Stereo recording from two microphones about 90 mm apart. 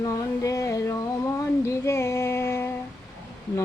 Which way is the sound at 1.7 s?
30° left (ahead or behind).